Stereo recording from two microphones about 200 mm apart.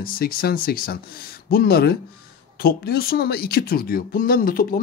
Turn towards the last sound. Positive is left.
turn(degrees=45)  # may be behind; listen again after turning